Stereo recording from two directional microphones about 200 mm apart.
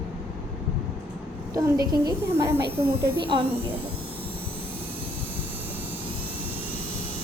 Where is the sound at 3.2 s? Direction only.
25° right (ahead or behind).